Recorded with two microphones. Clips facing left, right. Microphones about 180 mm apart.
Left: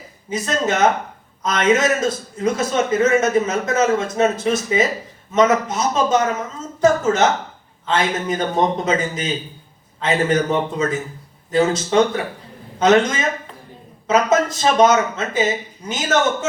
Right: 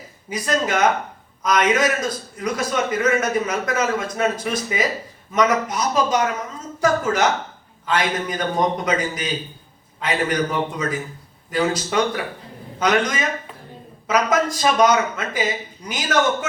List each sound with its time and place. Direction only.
0.3 s a man's voice: 25° left (ahead or behind)